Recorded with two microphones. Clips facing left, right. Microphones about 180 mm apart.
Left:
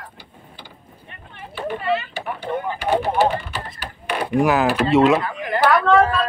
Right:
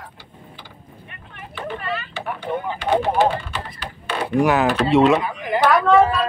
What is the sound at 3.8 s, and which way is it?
Speech, 5° left (ahead or behind).